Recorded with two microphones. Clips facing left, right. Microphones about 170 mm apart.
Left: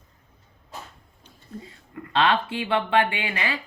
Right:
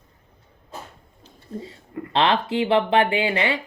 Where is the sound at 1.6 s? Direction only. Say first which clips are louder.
Right 6 dB; 30° right (ahead or behind).